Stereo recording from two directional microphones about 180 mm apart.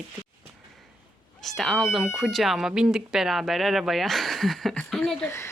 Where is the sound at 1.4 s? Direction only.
Centre (ahead or behind).